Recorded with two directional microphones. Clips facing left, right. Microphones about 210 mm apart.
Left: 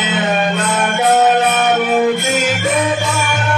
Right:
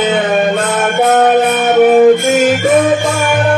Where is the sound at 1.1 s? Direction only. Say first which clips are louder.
Right 2 dB; 50° right (ahead or behind).